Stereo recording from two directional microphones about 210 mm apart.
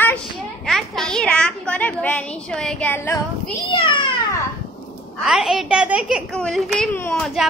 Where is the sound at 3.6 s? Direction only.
25° left (ahead or behind).